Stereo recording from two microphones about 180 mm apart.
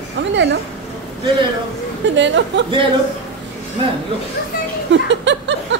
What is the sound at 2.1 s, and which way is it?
Speech, 80° right.